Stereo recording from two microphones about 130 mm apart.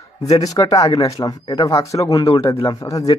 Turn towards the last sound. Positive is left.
turn(degrees=25)  # may be behind; listen again after turning